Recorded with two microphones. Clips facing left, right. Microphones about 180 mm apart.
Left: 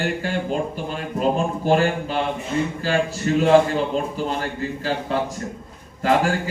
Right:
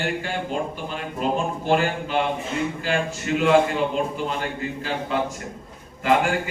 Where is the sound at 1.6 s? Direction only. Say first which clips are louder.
Left 3 dB; 40° left (ahead or behind).